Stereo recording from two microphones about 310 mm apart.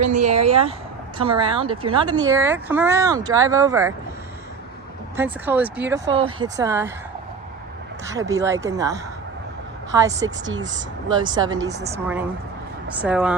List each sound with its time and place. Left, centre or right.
0.1 s speech: right
5.1 s speech: centre
8.0 s speech: centre